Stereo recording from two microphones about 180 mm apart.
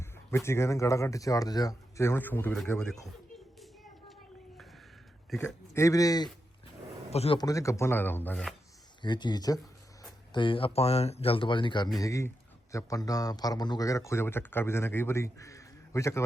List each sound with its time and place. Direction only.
0.0 s a man's voice: 15° left (ahead or behind)
5.3 s a man's voice: centre (ahead or behind)
5.7 s speech: 15° left (ahead or behind)
7.1 s a man's voice: 35° left (ahead or behind)
7.3 s a man's voice: 20° left (ahead or behind)
9.0 s a man's voice: 25° left (ahead or behind)